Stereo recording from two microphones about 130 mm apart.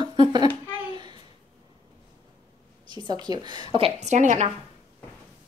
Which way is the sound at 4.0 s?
65° right (ahead or behind).